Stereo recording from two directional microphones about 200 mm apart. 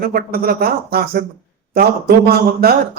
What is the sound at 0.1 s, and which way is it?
A man's voice, 50° right (ahead or behind).